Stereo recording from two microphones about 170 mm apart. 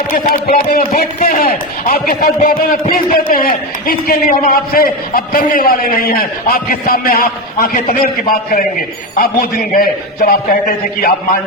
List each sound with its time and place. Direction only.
0.1 s a man's voice: 60° left (ahead or behind)